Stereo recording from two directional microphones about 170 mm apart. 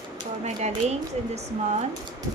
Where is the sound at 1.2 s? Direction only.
40° right (ahead or behind).